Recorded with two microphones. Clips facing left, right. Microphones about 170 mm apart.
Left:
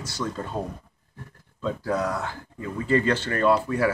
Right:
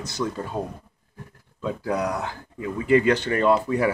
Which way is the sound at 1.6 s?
15° right (ahead or behind).